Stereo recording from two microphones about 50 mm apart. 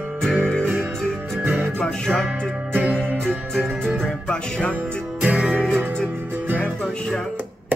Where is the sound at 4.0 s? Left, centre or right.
Centre.